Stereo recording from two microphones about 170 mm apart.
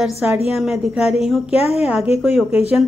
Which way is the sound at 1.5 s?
35° left (ahead or behind).